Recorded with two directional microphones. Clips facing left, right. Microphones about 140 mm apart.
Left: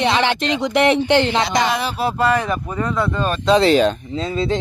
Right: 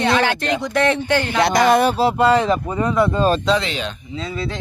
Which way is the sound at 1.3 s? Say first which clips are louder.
Right 3 dB; 55° right (ahead or behind).